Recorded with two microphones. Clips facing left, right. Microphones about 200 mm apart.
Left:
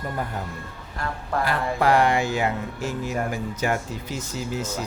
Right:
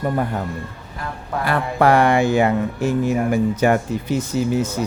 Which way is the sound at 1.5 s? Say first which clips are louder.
Right 6 dB; 60° right (ahead or behind).